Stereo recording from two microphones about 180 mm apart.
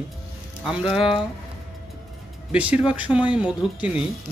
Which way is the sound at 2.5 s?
5° right (ahead or behind).